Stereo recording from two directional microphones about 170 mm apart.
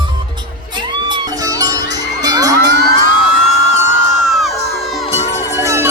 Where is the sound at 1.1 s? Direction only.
20° right (ahead or behind).